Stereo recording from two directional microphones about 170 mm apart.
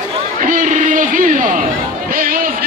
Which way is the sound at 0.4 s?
50° right (ahead or behind).